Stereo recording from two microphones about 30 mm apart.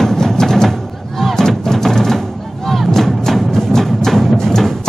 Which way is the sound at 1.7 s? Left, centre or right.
Centre.